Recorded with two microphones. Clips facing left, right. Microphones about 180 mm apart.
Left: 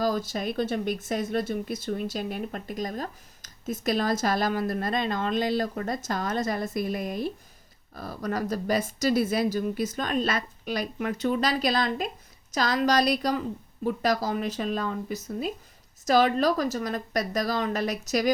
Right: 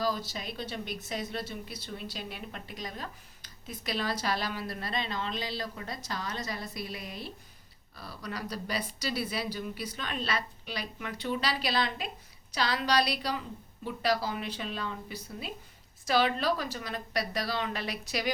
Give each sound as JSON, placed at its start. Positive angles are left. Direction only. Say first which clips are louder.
{"t": 0.0, "sound": "speech", "louder": "left 6 dB", "side_deg": 45}